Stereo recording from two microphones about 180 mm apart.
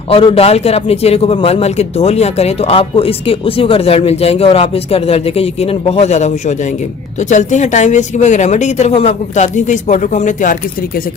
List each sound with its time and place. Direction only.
0.1 s a man's voice: 30° left (ahead or behind)